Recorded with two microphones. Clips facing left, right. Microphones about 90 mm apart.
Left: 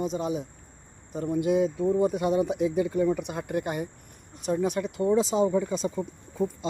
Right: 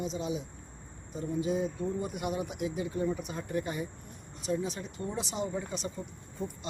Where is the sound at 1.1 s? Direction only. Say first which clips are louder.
Left 7 dB; 65° left (ahead or behind); by 5.1 s 80° left.